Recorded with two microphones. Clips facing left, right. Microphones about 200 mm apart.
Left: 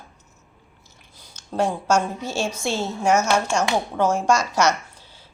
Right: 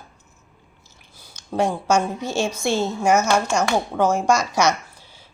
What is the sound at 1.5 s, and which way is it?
A woman's voice, 10° left (ahead or behind).